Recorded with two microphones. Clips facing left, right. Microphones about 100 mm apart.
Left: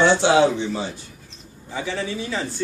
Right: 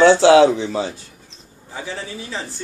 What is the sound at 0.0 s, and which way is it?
Speech, 90° right.